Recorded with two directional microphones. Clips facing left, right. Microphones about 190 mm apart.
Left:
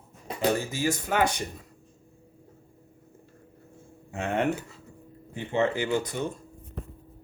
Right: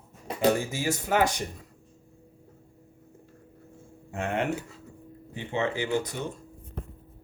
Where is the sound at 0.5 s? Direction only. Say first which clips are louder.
Left 1 dB; 10° right (ahead or behind).